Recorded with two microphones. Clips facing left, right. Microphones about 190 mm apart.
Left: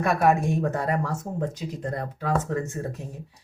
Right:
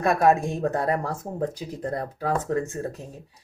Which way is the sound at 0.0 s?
30° right (ahead or behind).